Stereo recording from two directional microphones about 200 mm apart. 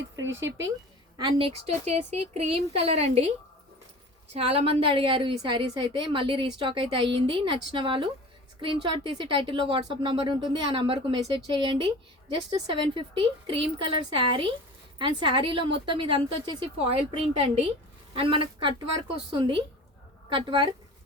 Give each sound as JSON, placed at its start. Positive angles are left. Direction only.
{"t": 0.2, "sound": "speech", "side_deg": -70}
{"t": 1.1, "sound": "speech", "side_deg": -25}
{"t": 4.4, "sound": "a woman's voice", "side_deg": -30}